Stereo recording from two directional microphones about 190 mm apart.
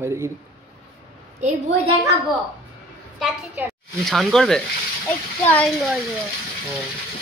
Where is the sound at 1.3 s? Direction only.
35° right (ahead or behind).